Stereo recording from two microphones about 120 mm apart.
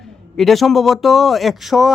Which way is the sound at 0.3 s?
Centre (ahead or behind).